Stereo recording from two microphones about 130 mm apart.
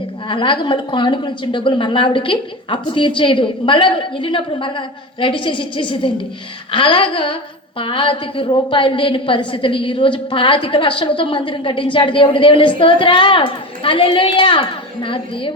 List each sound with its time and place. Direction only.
0.3 s a woman's voice: 40° left (ahead or behind)